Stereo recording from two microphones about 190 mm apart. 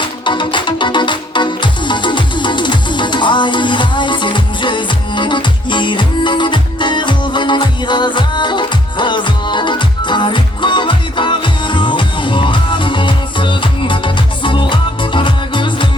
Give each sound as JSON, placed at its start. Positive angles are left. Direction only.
{"t": 0.3, "sound": "music", "side_deg": 25}